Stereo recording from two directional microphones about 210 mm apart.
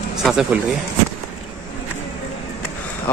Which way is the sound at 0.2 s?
Centre (ahead or behind).